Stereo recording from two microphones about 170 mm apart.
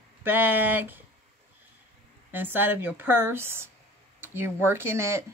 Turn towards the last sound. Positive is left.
turn(degrees=-15)  # may be behind; listen again after turning